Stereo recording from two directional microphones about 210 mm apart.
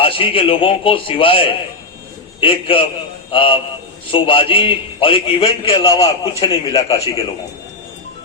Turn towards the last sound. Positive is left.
turn(degrees=20)  # may be behind; listen again after turning